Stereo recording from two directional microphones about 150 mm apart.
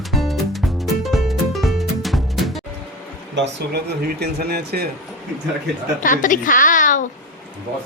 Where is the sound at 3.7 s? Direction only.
90° right.